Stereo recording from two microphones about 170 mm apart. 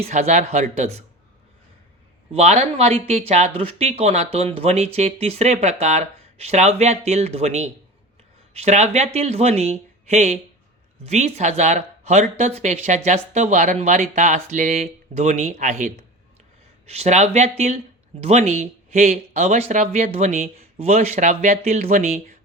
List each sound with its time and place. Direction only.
0.0 s speech: 40° right (ahead or behind)
2.3 s speech: 40° right (ahead or behind)